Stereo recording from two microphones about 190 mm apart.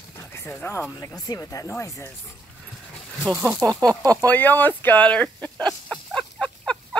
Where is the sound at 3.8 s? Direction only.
20° right (ahead or behind).